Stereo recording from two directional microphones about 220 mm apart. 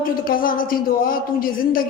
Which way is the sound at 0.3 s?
40° left (ahead or behind).